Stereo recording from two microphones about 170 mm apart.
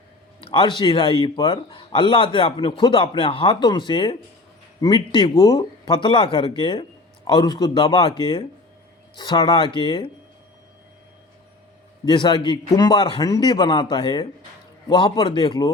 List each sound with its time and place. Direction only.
0.3 s a man's voice: 30° left (ahead or behind)
12.0 s a man's voice: 25° left (ahead or behind)